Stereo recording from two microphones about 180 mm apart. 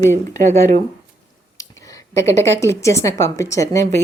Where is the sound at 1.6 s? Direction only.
20° left (ahead or behind).